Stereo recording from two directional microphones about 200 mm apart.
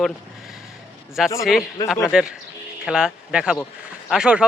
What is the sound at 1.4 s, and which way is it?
Speech, centre (ahead or behind).